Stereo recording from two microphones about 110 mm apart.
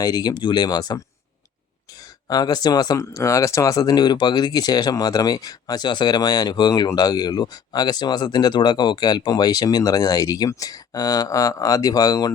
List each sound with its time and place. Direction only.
0.0 s speech: 40° left (ahead or behind)
2.2 s speech: 40° left (ahead or behind)